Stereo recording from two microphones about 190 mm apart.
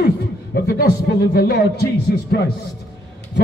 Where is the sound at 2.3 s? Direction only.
60° left (ahead or behind).